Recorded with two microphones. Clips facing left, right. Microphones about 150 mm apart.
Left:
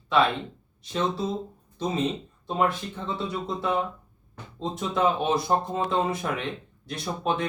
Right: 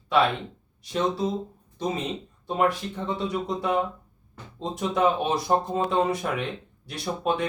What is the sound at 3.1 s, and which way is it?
Speech, 10° right (ahead or behind).